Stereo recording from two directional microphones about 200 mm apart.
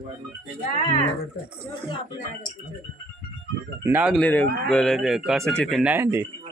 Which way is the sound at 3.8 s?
5° right (ahead or behind).